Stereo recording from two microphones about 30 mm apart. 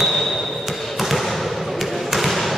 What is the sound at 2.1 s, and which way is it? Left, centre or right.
Basketball bounce, centre.